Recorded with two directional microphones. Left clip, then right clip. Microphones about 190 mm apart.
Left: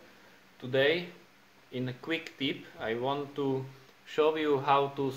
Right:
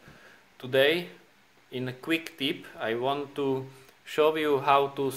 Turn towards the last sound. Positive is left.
turn(degrees=-30)  # may be behind; listen again after turning